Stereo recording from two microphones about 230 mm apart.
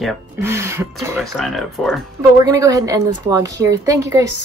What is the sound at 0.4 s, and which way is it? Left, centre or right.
Speech, centre.